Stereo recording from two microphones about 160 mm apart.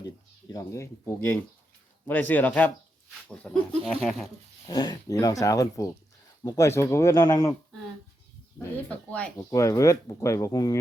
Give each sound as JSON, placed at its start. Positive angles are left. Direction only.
{"t": 0.5, "sound": "speech", "side_deg": 20}
{"t": 3.2, "sound": "a sound", "side_deg": 5}
{"t": 4.6, "sound": "speech", "side_deg": 25}
{"t": 8.5, "sound": "speech", "side_deg": 10}
{"t": 9.4, "sound": "speech", "side_deg": 20}